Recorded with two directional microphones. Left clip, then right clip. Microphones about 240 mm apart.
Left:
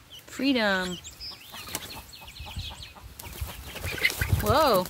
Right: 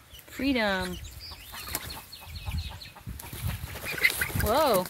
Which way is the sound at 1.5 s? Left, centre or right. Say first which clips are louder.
Right 2 dB; centre.